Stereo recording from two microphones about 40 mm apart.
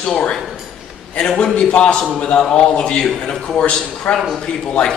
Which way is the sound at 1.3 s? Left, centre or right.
Centre.